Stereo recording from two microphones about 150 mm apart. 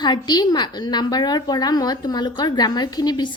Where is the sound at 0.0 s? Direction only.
30° left (ahead or behind).